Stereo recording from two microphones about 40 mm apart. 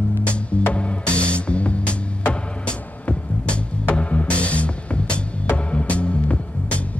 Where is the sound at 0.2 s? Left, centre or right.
Left.